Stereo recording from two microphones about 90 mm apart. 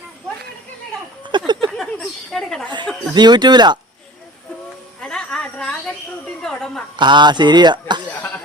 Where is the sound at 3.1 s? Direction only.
55° right (ahead or behind).